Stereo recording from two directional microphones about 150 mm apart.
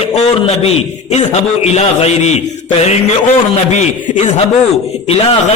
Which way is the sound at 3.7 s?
50° left (ahead or behind).